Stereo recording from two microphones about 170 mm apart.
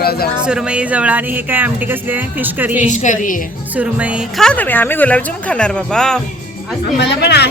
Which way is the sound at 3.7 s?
10° right (ahead or behind).